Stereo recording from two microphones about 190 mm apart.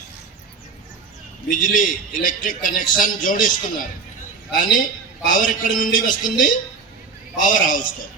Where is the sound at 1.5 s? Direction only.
45° left (ahead or behind).